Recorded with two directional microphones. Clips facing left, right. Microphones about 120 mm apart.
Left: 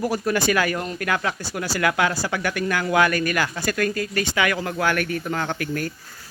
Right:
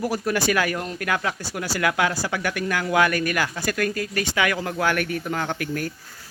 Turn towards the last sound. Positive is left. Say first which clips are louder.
# left 1 dB
turn(degrees=-15)  # may be behind; listen again after turning